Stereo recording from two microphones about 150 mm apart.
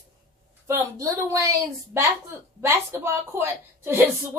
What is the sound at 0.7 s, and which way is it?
A woman's voice, 20° right (ahead or behind).